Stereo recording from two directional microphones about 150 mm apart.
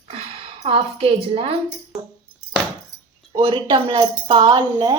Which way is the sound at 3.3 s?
30° right (ahead or behind).